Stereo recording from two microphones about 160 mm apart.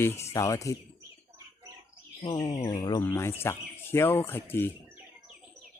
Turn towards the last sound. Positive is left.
turn(degrees=15)  # may be behind; listen again after turning